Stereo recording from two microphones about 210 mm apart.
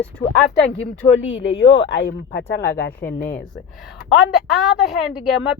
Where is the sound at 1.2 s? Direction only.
60° left (ahead or behind).